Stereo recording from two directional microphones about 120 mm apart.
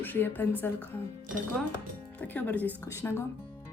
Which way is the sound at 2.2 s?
15° left (ahead or behind).